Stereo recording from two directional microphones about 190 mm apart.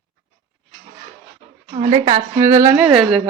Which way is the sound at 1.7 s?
30° right (ahead or behind).